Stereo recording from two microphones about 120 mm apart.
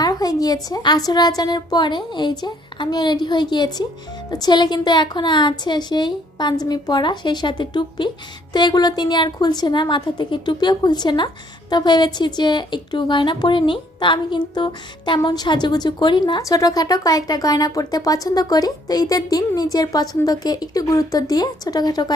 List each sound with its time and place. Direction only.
0.0 s a woman's voice: 30° left (ahead or behind)
16.4 s a woman's voice: 30° left (ahead or behind)